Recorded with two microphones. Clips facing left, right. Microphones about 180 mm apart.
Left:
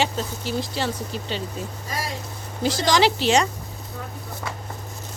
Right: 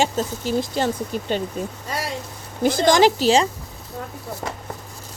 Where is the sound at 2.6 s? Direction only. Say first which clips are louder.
Right 4 dB; 50° right (ahead or behind).